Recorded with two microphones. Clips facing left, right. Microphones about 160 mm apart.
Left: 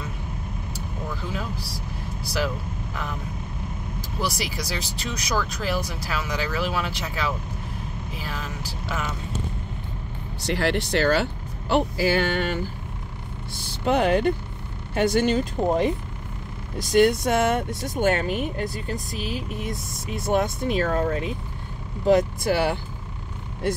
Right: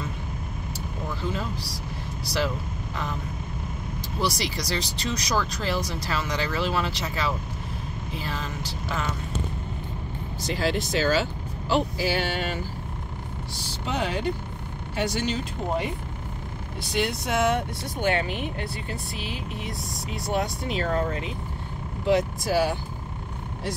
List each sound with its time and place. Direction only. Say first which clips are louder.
1.2 s speech: right 1 dB; centre (ahead or behind)
4.2 s speech: right 1 dB; centre (ahead or behind)
10.4 s speech: left 2 dB; 70° left (ahead or behind)
11.7 s speech: left 3 dB; 50° left (ahead or behind)
13.6 s speech: left 7 dB; 55° left (ahead or behind)